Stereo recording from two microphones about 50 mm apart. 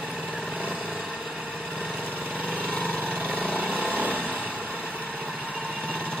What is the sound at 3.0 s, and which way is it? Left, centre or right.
Vehicle, right.